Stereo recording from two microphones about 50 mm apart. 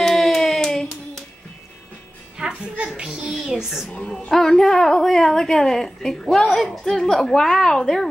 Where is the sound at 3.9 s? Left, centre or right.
Left.